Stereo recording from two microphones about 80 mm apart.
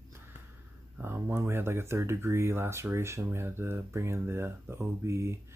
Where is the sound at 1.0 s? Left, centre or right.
Right.